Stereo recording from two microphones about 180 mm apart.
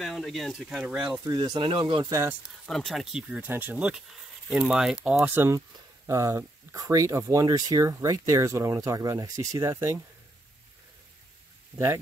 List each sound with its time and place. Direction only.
0.0 s speech: centre (ahead or behind)
1.2 s speech: 25° right (ahead or behind)
2.6 s speech: centre (ahead or behind); by 9.9 s 15° right (ahead or behind)